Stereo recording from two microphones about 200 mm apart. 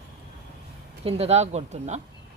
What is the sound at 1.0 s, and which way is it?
Speech, 30° right (ahead or behind).